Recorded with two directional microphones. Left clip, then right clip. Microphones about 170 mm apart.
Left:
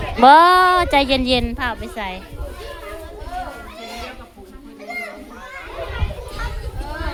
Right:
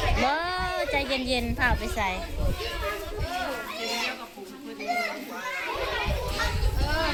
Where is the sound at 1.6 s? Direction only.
30° left (ahead or behind).